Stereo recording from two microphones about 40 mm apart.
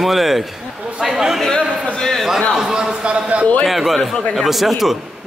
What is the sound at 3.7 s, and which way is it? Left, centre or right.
Speech, centre.